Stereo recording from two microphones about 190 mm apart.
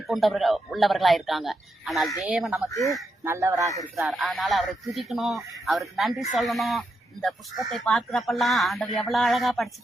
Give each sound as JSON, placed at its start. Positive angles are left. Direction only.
{"t": 0.1, "sound": "speech", "side_deg": 0}
{"t": 2.6, "sound": "speech", "side_deg": 15}
{"t": 3.2, "sound": "speech", "side_deg": -15}
{"t": 4.0, "sound": "speech", "side_deg": 0}